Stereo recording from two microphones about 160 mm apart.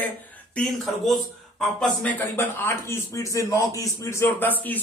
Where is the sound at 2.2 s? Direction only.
15° left (ahead or behind).